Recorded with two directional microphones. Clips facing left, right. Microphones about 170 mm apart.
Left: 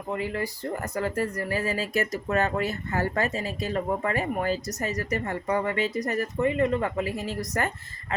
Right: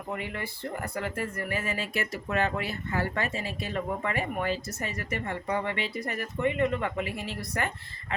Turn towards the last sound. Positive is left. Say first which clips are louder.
# left 4 dB
turn(degrees=40)  # may be behind; listen again after turning